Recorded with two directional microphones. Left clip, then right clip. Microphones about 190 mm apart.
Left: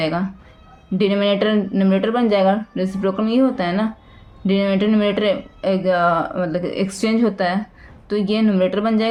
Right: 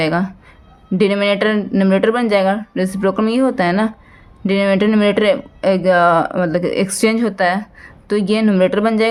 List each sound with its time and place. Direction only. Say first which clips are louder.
0.0 s speech: right 4 dB; 40° right (ahead or behind)